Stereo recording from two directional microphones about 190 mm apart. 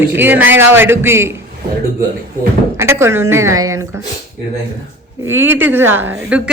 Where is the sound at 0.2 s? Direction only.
10° right (ahead or behind).